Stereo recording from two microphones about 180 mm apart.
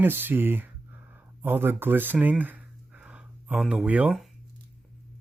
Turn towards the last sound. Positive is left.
turn(degrees=-5)  # may be behind; listen again after turning